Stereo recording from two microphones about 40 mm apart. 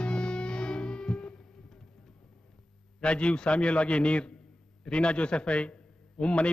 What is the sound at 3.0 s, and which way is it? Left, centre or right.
A man's voice, left.